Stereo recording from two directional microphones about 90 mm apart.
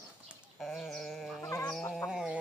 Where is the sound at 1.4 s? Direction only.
30° left (ahead or behind).